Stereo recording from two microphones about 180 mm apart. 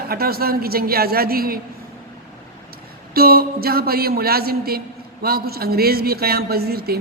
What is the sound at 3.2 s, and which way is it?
Speech, 55° right (ahead or behind).